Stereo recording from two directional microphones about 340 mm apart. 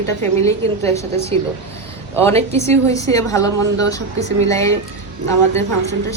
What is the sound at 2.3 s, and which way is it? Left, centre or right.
Speech, centre.